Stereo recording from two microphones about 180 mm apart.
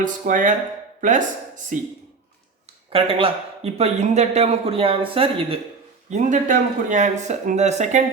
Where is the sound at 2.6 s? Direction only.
30° right (ahead or behind).